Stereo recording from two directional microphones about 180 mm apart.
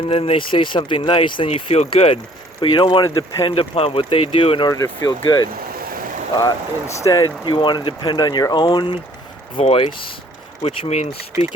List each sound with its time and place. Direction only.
0.1 s speech: 30° left (ahead or behind)
4.7 s speech: 20° left (ahead or behind)
5.9 s vehicle: 50° right (ahead or behind)
6.3 s speech: 15° left (ahead or behind); by 11.1 s 40° left (ahead or behind)